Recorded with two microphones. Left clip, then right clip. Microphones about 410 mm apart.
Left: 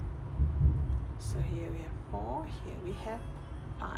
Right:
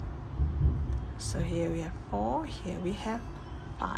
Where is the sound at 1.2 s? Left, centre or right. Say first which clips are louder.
Right 9 dB; centre.